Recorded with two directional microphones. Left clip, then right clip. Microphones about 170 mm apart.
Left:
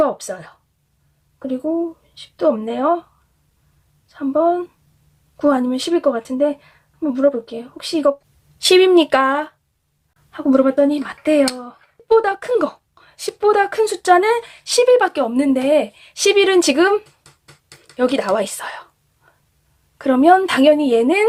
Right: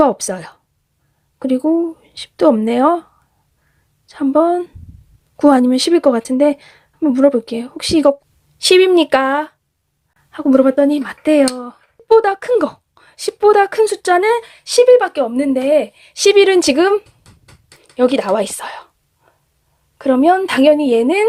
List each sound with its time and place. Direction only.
0.0 s a woman's voice: 40° right (ahead or behind)
8.5 s speech: 20° right (ahead or behind); by 11.8 s 35° right (ahead or behind)
12.0 s a woman's voice: 25° right (ahead or behind)